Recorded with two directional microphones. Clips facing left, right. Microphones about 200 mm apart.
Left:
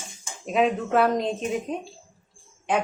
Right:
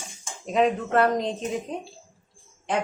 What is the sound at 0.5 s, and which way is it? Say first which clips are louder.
Speech: even; 5° left (ahead or behind).